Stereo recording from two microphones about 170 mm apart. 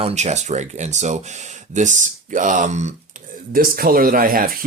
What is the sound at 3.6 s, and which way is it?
Speech, 60° right (ahead or behind).